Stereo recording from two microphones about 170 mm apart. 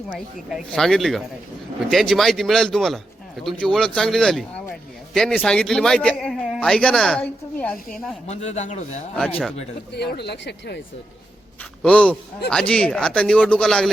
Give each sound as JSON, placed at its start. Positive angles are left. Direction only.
{"t": 0.5, "sound": "a man's voice", "side_deg": 0}
{"t": 8.3, "sound": "a man's voice", "side_deg": 40}
{"t": 9.9, "sound": "speech", "side_deg": 75}
{"t": 11.8, "sound": "speech", "side_deg": 5}